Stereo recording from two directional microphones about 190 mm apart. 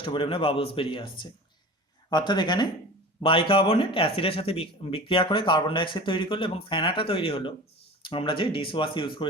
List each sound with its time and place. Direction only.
0.0 s speech: 30° left (ahead or behind)